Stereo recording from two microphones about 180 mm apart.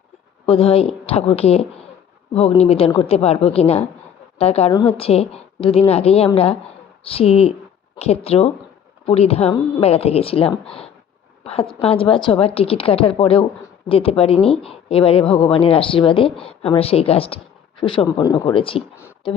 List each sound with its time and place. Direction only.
0.4 s a woman's voice: 35° left (ahead or behind)